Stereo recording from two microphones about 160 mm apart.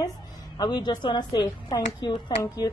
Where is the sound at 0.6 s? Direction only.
25° left (ahead or behind).